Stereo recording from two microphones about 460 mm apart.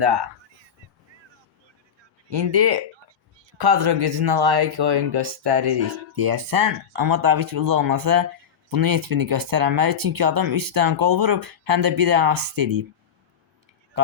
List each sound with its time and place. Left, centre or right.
0.0 s speech: right
2.3 s speech: right
14.0 s a sound: right